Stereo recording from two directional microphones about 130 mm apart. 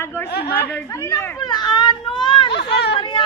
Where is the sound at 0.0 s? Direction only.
15° left (ahead or behind).